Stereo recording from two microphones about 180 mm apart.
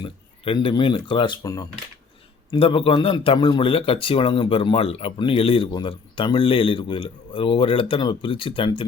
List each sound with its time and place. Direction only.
0.0 s a man's voice: 30° left (ahead or behind)